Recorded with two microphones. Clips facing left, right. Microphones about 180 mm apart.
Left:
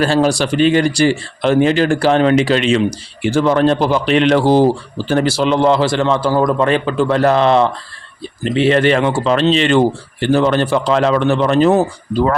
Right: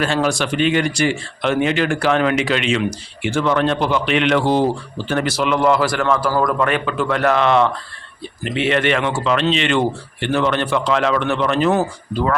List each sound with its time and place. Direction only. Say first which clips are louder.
0.0 s speech: left 5 dB; 35° left (ahead or behind)